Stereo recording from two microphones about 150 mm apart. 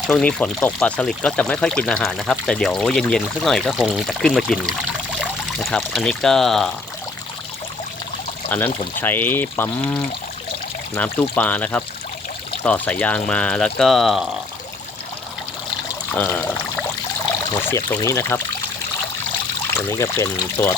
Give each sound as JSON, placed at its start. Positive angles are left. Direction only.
{"t": 0.1, "sound": "speech", "side_deg": 5}
{"t": 8.4, "sound": "speech", "side_deg": 10}
{"t": 16.1, "sound": "speech", "side_deg": 10}
{"t": 17.7, "sound": "speech", "side_deg": 20}
{"t": 19.7, "sound": "speech", "side_deg": 20}